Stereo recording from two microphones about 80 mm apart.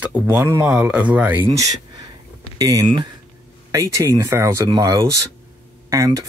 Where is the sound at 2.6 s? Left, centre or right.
Right.